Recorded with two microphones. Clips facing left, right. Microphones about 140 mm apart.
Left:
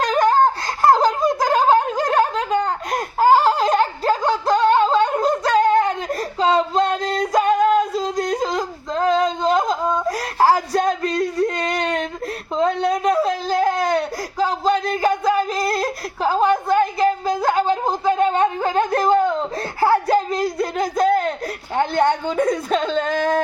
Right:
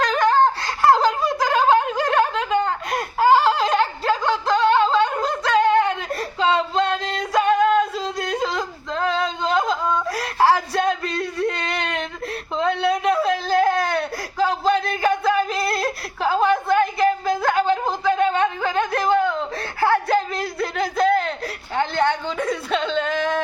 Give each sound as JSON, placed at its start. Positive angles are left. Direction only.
{"t": 0.0, "sound": "laughter", "side_deg": 45}
{"t": 0.8, "sound": "snicker", "side_deg": 40}
{"t": 6.7, "sound": "music", "side_deg": 40}
{"t": 7.9, "sound": "a sound", "side_deg": 40}
{"t": 13.2, "sound": "baby cry", "side_deg": 40}
{"t": 21.9, "sound": "a sound", "side_deg": 50}